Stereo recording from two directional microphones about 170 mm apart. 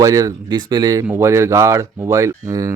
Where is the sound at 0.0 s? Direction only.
20° right (ahead or behind).